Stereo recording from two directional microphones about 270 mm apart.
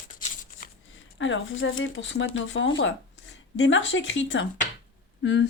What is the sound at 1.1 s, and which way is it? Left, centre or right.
Speech, left.